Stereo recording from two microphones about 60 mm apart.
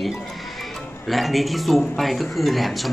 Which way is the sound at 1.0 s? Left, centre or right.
Centre.